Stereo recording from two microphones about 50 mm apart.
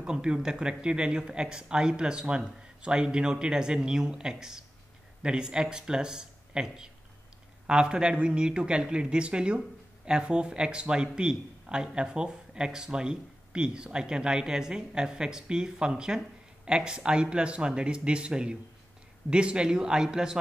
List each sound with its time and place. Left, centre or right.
0.0 s a man's voice: centre